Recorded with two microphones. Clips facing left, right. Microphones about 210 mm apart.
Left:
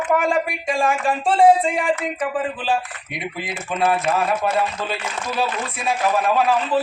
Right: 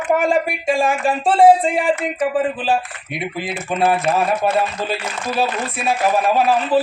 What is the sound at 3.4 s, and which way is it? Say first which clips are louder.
Speech: right 3 dB; 30° right (ahead or behind).